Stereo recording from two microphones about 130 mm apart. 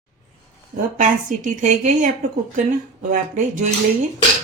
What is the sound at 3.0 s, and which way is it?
Speech, 80° right.